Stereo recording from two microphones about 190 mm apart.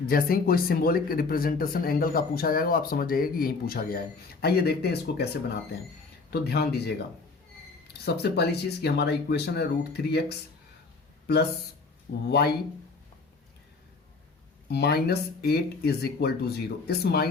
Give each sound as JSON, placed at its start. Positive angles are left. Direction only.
{"t": 0.0, "sound": "speech", "side_deg": 50}
{"t": 6.3, "sound": "speech", "side_deg": 60}
{"t": 8.0, "sound": "speech", "side_deg": 60}
{"t": 12.1, "sound": "speech", "side_deg": 65}
{"t": 14.7, "sound": "speech", "side_deg": 60}